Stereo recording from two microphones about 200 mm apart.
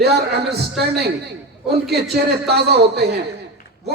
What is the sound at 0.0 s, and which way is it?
A man's voice, 55° right (ahead or behind).